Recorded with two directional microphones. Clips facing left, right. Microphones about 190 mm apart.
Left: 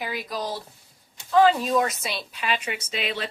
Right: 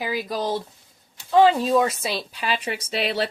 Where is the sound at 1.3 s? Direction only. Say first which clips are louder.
Right 2 dB; 30° right (ahead or behind).